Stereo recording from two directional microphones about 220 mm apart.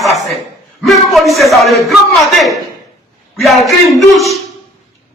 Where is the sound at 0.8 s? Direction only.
Centre (ahead or behind).